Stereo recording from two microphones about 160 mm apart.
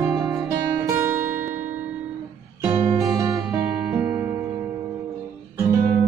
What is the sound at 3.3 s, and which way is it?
Music, centre (ahead or behind).